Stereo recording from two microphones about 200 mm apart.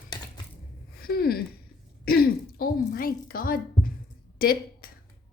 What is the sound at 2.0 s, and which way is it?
Throat clearing, 50° left (ahead or behind).